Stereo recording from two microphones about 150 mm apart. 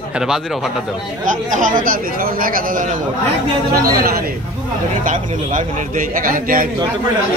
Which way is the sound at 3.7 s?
80° right.